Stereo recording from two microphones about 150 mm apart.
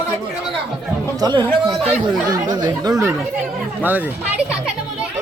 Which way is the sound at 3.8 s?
10° right (ahead or behind).